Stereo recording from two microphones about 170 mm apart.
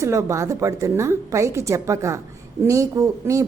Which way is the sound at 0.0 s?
15° right (ahead or behind).